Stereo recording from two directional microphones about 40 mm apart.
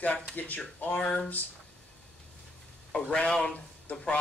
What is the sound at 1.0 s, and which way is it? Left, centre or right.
Speech, left.